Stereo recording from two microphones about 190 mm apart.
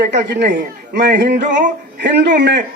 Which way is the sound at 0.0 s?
65° right (ahead or behind).